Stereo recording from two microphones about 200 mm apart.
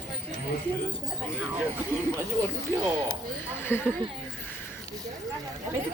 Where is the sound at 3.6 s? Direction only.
10° left (ahead or behind).